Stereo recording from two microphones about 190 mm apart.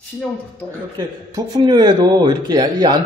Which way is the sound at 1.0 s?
20° right (ahead or behind).